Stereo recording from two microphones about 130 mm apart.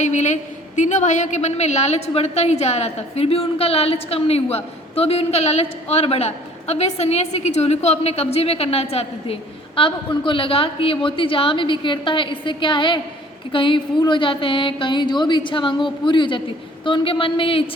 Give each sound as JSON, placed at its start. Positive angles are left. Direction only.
{"t": 0.0, "sound": "a woman's voice", "side_deg": 65}